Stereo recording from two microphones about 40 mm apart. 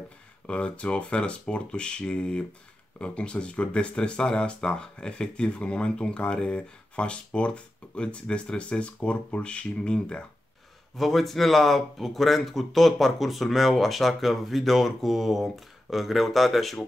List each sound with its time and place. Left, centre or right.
0.5 s speech: left
11.0 s speech: centre